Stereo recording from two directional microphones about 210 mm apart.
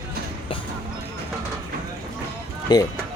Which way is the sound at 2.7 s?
20° left (ahead or behind).